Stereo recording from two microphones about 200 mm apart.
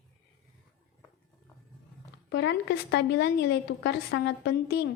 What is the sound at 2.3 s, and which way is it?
A woman's voice, 60° left (ahead or behind).